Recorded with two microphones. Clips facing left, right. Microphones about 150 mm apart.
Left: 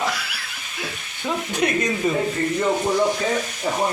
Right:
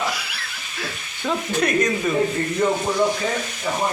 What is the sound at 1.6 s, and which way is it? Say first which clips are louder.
Speech: even; 15° left (ahead or behind).